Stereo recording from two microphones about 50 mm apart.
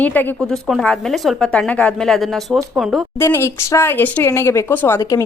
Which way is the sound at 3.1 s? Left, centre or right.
Left.